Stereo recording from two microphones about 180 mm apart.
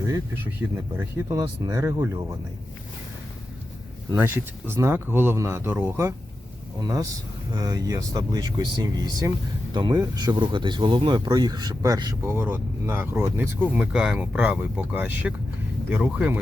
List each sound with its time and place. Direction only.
0.8 s speech: 15° right (ahead or behind)
4.1 s speech: 10° right (ahead or behind)
7.6 s speech: 20° right (ahead or behind)